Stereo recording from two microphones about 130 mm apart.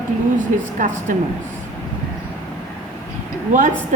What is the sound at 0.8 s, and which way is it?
Speech, 85° right.